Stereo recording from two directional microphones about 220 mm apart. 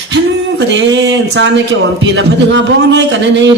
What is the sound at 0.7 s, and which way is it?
A man's voice, 55° right (ahead or behind).